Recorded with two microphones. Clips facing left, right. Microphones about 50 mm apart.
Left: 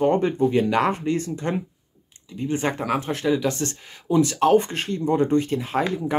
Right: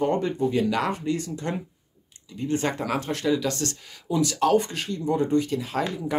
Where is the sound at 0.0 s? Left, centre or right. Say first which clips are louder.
Left 4 dB; left.